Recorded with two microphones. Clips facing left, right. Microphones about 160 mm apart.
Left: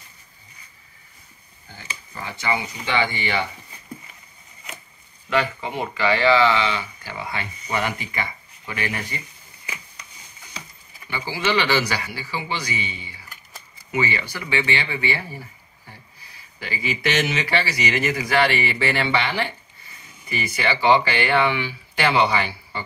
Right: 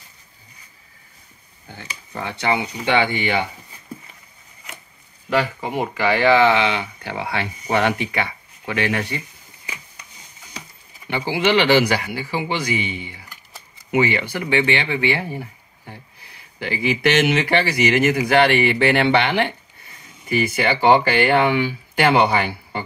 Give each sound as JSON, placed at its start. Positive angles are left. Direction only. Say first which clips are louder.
{"t": 1.7, "sound": "speech", "louder": "right 3 dB", "side_deg": -65}
{"t": 5.3, "sound": "speech", "louder": "right 2 dB", "side_deg": -40}
{"t": 5.9, "sound": "speech", "louder": "right 2 dB", "side_deg": -50}
{"t": 11.1, "sound": "speech", "louder": "right 5 dB", "side_deg": -60}